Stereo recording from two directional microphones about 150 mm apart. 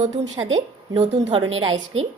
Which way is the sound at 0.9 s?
40° right (ahead or behind).